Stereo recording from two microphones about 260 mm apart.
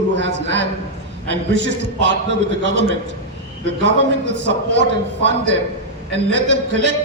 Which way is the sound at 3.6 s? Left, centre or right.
Right.